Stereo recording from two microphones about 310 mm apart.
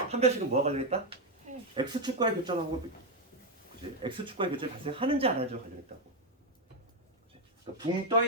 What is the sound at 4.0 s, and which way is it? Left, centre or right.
Speech, centre.